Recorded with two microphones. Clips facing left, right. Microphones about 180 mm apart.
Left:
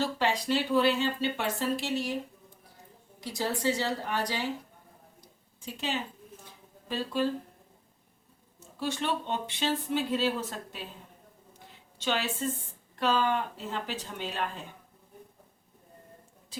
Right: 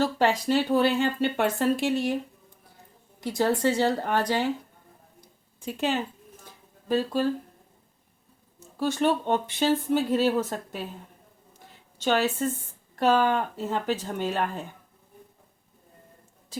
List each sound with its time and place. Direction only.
0.0 s speech: 45° right (ahead or behind)
3.2 s a woman's voice: 55° right (ahead or behind)
5.5 s speech: 55° right (ahead or behind)
8.8 s speech: 45° right (ahead or behind)
11.9 s speech: 45° right (ahead or behind)